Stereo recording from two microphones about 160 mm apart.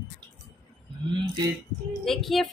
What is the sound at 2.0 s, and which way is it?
Speech, centre (ahead or behind).